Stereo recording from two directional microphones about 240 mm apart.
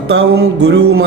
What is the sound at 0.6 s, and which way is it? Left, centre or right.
Speech, right.